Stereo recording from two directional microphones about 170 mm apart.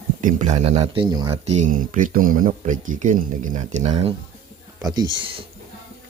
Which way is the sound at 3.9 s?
30° right (ahead or behind).